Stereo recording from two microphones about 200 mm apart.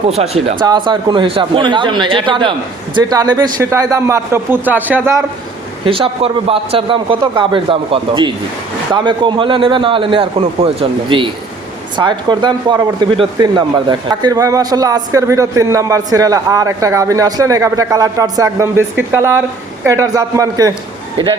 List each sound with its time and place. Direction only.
0.2 s a man's voice: 30° right (ahead or behind); by 5.2 s 10° right (ahead or behind)
5.8 s a man's voice: 25° right (ahead or behind)